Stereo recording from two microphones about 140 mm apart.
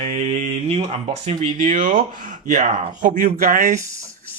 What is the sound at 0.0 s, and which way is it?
Speech, 50° right (ahead or behind).